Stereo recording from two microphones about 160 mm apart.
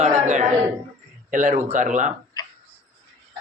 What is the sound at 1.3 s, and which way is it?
Speech, 50° right (ahead or behind).